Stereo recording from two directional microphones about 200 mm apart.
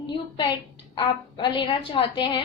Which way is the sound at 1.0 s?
20° left (ahead or behind).